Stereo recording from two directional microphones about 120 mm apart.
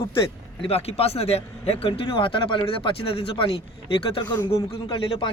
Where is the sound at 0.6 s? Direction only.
55° left (ahead or behind).